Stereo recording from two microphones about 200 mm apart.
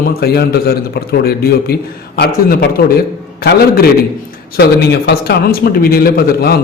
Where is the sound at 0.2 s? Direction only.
50° left (ahead or behind).